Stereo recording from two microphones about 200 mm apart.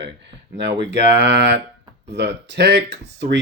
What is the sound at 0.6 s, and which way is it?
Speech, 60° right (ahead or behind).